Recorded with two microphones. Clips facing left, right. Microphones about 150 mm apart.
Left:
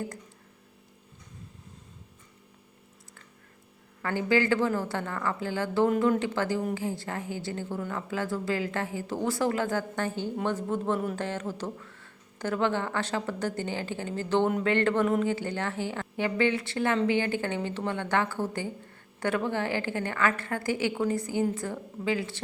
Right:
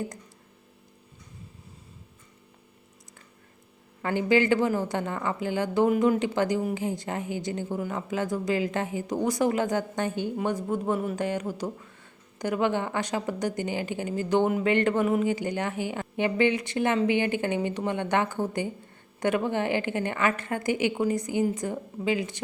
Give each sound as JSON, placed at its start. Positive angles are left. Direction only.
{"t": 4.0, "sound": "speech", "side_deg": -20}